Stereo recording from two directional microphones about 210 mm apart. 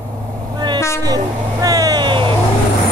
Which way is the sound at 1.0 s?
15° right (ahead or behind).